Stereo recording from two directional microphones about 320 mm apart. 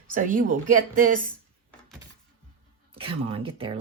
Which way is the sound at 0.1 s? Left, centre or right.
Right.